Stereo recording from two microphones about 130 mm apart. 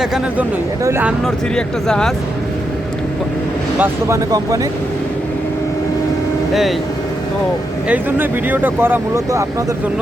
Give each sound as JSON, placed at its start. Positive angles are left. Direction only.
{"t": 0.0, "sound": "speech", "side_deg": -5}
{"t": 0.9, "sound": "speech", "side_deg": -15}
{"t": 1.2, "sound": "speech", "side_deg": 5}
{"t": 6.5, "sound": "speech", "side_deg": 0}
{"t": 7.9, "sound": "speech", "side_deg": -15}